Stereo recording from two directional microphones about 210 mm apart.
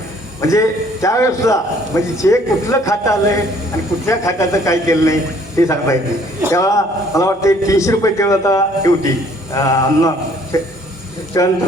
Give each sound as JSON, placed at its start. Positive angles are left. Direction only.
{"t": 0.4, "sound": "a man's voice", "side_deg": 15}